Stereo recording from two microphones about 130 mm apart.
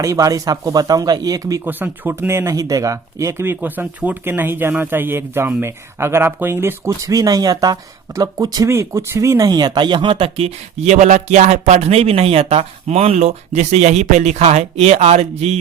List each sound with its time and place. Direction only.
0.0 s speech: 25° right (ahead or behind)
1.6 s speech: 15° right (ahead or behind); by 15.5 s 55° right (ahead or behind)